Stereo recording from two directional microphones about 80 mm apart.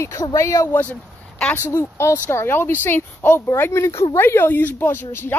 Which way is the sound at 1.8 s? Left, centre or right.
Left.